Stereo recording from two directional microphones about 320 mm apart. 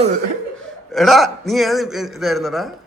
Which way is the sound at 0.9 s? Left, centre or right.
Centre.